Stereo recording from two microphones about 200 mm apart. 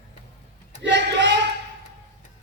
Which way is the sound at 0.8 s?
60° right (ahead or behind).